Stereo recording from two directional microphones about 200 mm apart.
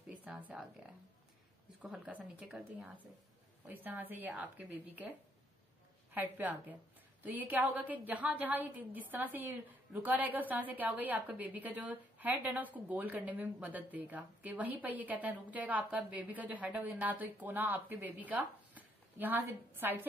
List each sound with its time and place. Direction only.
0.1 s a sound: 5° right (ahead or behind)
1.8 s a woman's voice: 5° right (ahead or behind)
6.1 s a woman's voice: 10° right (ahead or behind)